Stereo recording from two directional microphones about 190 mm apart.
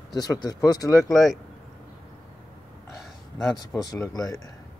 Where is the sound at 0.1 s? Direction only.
20° left (ahead or behind).